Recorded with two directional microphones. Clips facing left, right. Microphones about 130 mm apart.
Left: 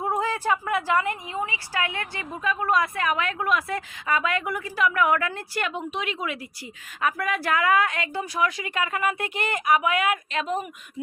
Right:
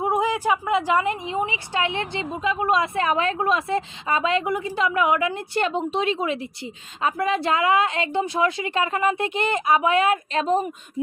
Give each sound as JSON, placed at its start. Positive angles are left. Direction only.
{"t": 0.0, "sound": "a woman's voice", "side_deg": -15}
{"t": 5.6, "sound": "a woman's voice", "side_deg": -30}